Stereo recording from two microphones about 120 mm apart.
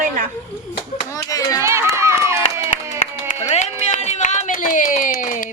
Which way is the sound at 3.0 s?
70° left (ahead or behind).